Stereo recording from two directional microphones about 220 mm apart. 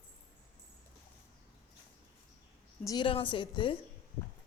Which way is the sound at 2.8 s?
20° left (ahead or behind).